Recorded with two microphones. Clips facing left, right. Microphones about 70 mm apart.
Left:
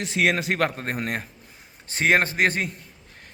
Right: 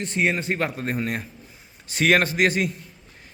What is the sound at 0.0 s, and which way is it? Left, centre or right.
Speech, left.